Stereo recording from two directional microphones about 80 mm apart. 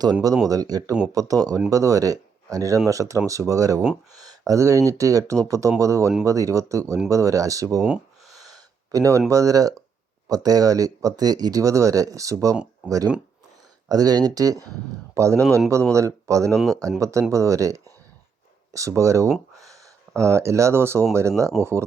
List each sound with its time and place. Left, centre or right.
0.0 s speech: right
7.8 s speech: centre
8.3 s gasp: right
9.3 s speech: right
13.8 s a man's voice: right
16.5 s speech: centre
17.0 s speech: right
19.5 s a sound: right
21.1 s speech: right